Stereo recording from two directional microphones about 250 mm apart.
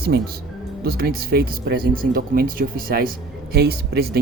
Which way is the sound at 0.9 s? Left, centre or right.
Right.